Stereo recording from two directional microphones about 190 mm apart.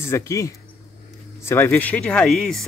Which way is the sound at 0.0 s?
15° left (ahead or behind).